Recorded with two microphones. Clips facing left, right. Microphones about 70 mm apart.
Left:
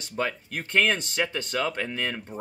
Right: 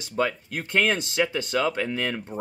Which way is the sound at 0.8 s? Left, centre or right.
Centre.